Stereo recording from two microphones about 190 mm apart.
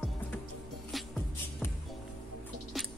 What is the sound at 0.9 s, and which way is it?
Music, centre (ahead or behind).